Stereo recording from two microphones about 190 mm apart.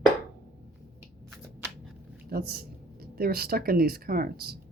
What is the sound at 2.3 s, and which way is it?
Speech, 55° right (ahead or behind).